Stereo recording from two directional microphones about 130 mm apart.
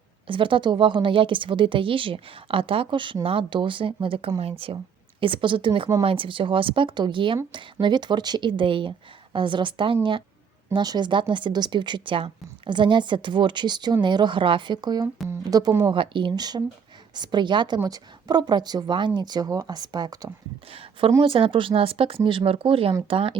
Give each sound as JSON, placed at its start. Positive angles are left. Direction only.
{"t": 0.3, "sound": "speech", "side_deg": -40}
{"t": 20.7, "sound": "speech", "side_deg": -50}